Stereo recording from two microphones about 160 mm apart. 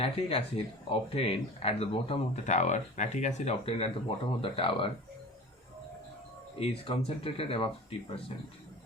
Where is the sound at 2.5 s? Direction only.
45° left (ahead or behind).